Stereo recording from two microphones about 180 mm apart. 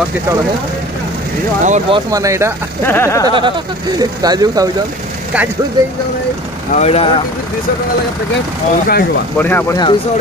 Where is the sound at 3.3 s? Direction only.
25° right (ahead or behind).